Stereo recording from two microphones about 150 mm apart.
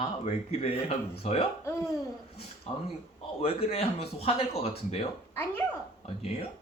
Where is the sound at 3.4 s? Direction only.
40° left (ahead or behind).